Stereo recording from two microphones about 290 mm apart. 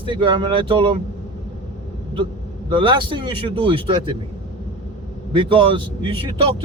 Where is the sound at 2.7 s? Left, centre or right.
Centre.